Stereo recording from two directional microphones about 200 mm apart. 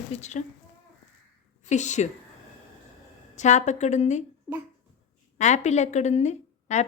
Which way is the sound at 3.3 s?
35° left (ahead or behind).